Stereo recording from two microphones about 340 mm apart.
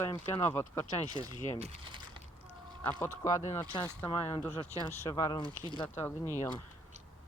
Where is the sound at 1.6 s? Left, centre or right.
Centre.